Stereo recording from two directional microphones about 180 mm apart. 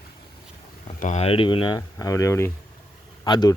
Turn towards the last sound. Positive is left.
turn(degrees=25)  # may be behind; listen again after turning